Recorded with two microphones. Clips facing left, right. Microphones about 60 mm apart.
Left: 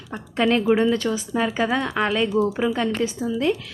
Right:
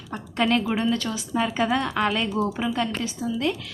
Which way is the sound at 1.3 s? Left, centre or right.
Centre.